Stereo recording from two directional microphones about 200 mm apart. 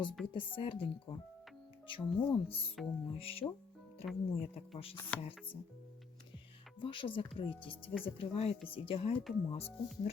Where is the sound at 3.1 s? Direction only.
30° left (ahead or behind).